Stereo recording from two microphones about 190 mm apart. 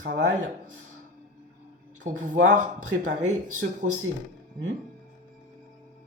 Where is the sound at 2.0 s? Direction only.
40° right (ahead or behind).